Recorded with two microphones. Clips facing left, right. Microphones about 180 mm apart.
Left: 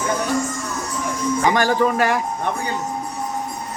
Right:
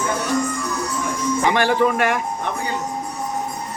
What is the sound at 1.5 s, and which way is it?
Speech, 40° left (ahead or behind).